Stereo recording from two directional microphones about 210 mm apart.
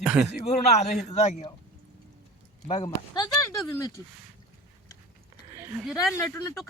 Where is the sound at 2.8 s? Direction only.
20° left (ahead or behind).